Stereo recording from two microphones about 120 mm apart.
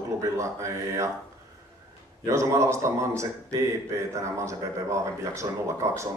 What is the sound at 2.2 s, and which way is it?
Speech, 25° right (ahead or behind).